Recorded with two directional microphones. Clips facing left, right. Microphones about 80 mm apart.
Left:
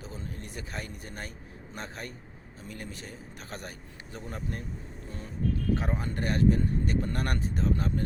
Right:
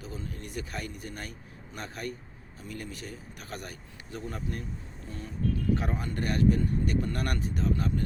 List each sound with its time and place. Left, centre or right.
0.0 s a man's voice: left
5.7 s speech: left